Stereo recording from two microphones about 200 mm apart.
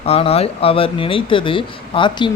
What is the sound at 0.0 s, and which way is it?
Speech, 30° left (ahead or behind).